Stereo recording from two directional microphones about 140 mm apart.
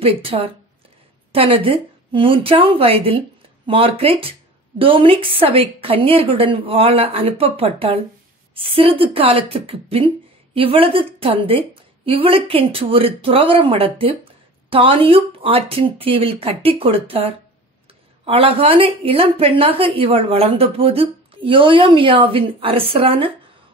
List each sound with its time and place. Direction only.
0.0 s a woman's voice: 40° right (ahead or behind)